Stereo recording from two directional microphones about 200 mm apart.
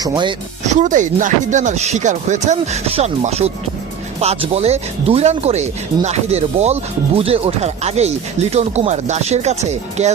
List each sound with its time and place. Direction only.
0.0 s speech: 20° right (ahead or behind)
0.6 s speech: 35° right (ahead or behind)